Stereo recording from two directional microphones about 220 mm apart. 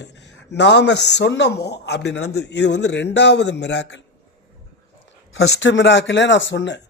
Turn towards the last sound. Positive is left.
turn(degrees=55)  # may be behind; listen again after turning